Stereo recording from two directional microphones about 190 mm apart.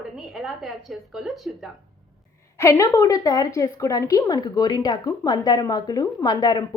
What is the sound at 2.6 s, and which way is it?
A woman's voice, 15° left (ahead or behind).